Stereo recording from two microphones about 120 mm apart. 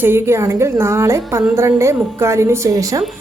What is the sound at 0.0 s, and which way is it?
A woman's voice, 20° right (ahead or behind).